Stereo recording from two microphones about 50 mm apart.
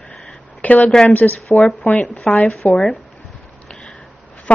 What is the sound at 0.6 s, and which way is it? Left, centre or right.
A woman's voice, left.